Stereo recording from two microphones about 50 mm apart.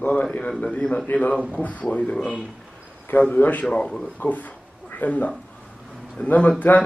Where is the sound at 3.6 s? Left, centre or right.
Centre.